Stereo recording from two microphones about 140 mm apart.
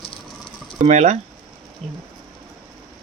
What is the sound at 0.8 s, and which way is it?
Speech, 55° right (ahead or behind).